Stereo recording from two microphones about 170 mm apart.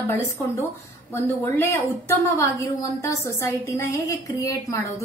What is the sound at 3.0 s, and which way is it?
A woman's voice, 15° left (ahead or behind).